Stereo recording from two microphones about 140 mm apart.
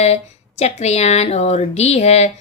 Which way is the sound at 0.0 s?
50° left (ahead or behind).